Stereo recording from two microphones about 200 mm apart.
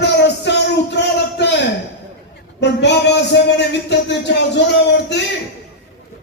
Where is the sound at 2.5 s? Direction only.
60° left (ahead or behind).